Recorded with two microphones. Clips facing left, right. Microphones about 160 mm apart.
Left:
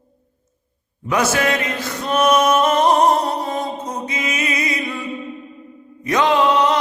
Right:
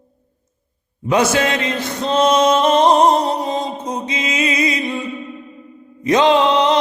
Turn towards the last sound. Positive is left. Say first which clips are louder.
# right 2 dB
turn(degrees=-20)  # may be behind; listen again after turning